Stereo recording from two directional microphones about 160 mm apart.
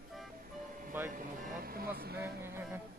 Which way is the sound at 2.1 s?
15° right (ahead or behind).